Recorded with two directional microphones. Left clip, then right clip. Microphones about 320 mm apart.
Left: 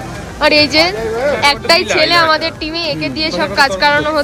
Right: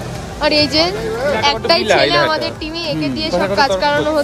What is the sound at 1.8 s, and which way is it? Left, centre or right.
Speech, right.